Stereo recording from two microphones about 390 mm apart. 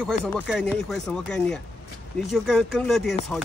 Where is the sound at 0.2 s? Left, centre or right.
Centre.